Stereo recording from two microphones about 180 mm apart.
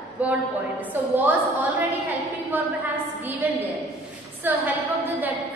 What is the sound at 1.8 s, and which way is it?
Speech, 15° right (ahead or behind).